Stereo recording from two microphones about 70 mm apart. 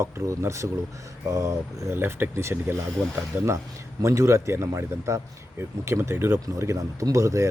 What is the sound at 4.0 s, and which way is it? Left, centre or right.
Speech, right.